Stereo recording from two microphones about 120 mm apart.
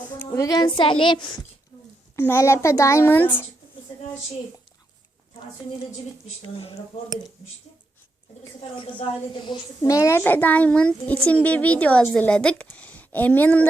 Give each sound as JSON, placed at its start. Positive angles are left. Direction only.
{"t": 0.3, "sound": "a woman's voice", "side_deg": 30}
{"t": 2.1, "sound": "a child's voice", "side_deg": 20}
{"t": 8.8, "sound": "a woman's voice", "side_deg": 45}
{"t": 9.8, "sound": "a child's voice", "side_deg": 25}